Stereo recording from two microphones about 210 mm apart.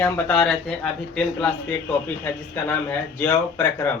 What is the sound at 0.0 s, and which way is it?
Speech, 5° left (ahead or behind).